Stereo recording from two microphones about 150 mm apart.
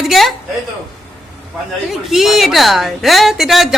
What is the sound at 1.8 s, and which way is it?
A man's voice, centre (ahead or behind).